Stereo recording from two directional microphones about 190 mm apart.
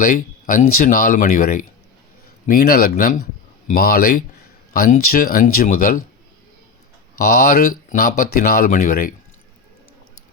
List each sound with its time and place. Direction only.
0.0 s speech: 45° left (ahead or behind)
7.3 s speech: 50° left (ahead or behind)